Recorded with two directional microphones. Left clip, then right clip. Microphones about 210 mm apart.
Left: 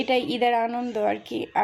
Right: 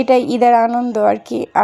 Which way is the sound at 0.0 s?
30° right (ahead or behind).